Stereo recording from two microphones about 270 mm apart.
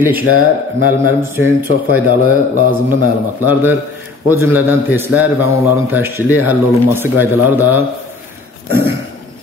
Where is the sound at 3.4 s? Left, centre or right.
Centre.